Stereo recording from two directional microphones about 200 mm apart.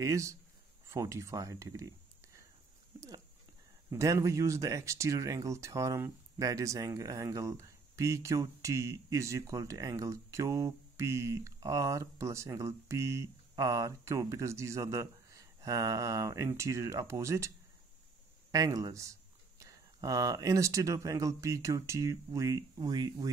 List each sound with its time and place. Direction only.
0.0 s speech: 15° right (ahead or behind)
3.9 s speech: 15° right (ahead or behind)
18.5 s speech: 15° right (ahead or behind)